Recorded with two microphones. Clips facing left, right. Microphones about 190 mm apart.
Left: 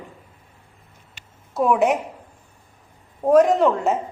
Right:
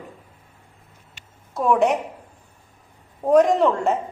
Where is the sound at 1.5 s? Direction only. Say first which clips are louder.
Even; 5° left (ahead or behind).